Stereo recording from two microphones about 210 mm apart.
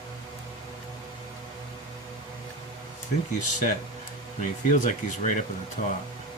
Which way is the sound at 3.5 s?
35° left (ahead or behind).